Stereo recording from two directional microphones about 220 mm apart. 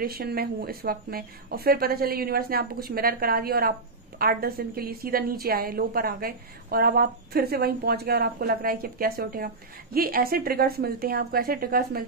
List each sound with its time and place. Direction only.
0.0 s a woman's voice: 45° right (ahead or behind)